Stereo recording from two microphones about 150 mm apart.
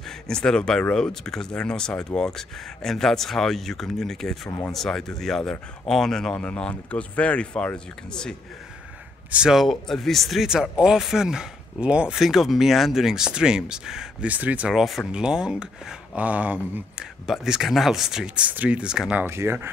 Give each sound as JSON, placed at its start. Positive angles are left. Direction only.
{"t": 0.3, "sound": "speech", "side_deg": 5}
{"t": 4.5, "sound": "speech", "side_deg": 20}
{"t": 4.7, "sound": "speech", "side_deg": 5}